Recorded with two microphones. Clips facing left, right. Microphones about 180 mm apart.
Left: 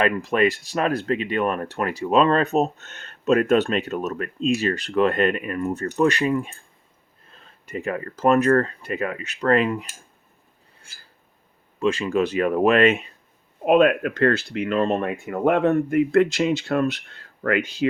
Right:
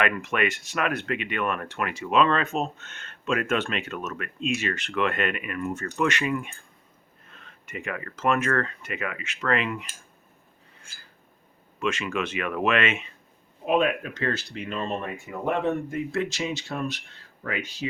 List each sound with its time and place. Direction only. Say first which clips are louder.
0.0 s speech: left 6 dB; 35° left (ahead or behind)
11.8 s speech: left 7 dB; 35° left (ahead or behind)
13.7 s speech: left 7 dB; 60° left (ahead or behind)